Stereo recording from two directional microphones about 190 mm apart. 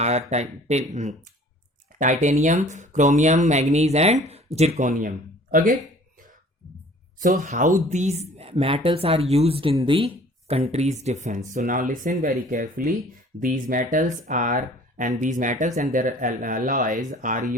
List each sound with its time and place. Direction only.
0.0 s speech: 35° right (ahead or behind)
2.2 s speech: 40° right (ahead or behind)
7.2 s speech: 40° right (ahead or behind)